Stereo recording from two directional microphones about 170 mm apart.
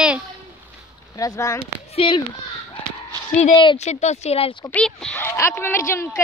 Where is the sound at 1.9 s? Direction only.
30° left (ahead or behind).